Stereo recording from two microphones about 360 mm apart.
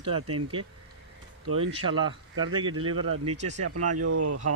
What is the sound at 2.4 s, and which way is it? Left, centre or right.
Speech, centre.